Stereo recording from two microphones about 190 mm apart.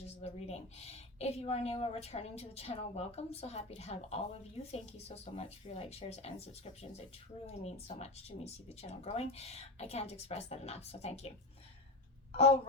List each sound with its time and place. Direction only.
0.2 s speech: 35° left (ahead or behind)